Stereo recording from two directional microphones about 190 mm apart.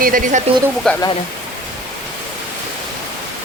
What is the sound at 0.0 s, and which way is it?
Speech, 45° right (ahead or behind).